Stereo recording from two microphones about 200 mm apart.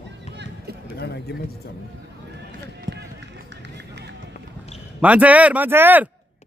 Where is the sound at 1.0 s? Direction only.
55° left (ahead or behind).